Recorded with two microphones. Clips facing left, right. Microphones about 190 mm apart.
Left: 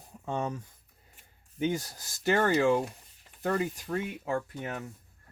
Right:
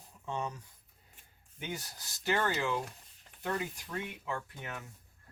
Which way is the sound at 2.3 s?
45° left (ahead or behind).